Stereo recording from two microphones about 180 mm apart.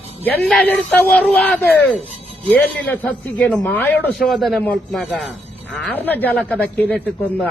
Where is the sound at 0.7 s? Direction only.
5° left (ahead or behind).